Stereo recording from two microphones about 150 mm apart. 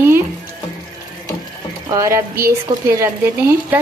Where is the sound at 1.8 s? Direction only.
20° right (ahead or behind).